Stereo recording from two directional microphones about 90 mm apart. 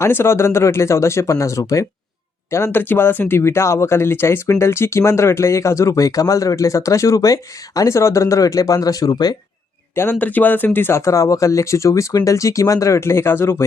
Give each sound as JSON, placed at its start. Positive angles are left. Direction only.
{"t": 0.0, "sound": "speech", "side_deg": 30}
{"t": 9.9, "sound": "speech", "side_deg": 25}